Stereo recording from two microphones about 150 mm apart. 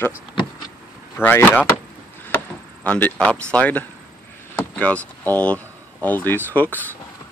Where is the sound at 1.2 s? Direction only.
15° left (ahead or behind).